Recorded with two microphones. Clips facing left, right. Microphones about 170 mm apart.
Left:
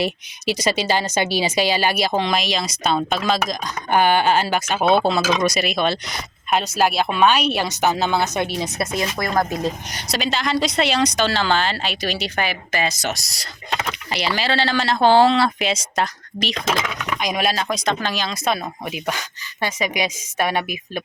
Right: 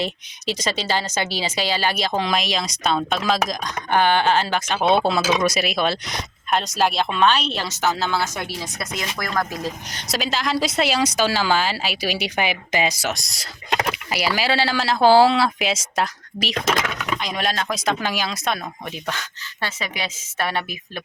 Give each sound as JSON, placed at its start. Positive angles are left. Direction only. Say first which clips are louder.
{"t": 0.0, "sound": "speech", "louder": "left 3 dB", "side_deg": 10}
{"t": 3.9, "sound": "speech", "louder": "left 1 dB", "side_deg": 10}
{"t": 10.1, "sound": "speech", "louder": "left 1 dB", "side_deg": 0}
{"t": 13.1, "sound": "speech", "louder": "even", "side_deg": 0}
{"t": 16.6, "sound": "speech", "louder": "right 1 dB", "side_deg": 15}
{"t": 19.6, "sound": "speech", "louder": "left 6 dB", "side_deg": 15}